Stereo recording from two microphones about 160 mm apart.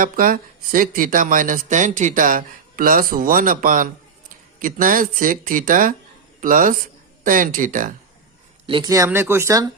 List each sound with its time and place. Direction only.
0.0 s speech: 60° right (ahead or behind)
8.6 s speech: 30° right (ahead or behind)
9.0 s speech: 15° right (ahead or behind)